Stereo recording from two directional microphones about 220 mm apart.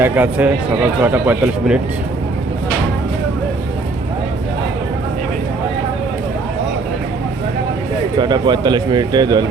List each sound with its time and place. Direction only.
0.0 s a man's voice: 5° right (ahead or behind)
8.2 s speech: 20° right (ahead or behind)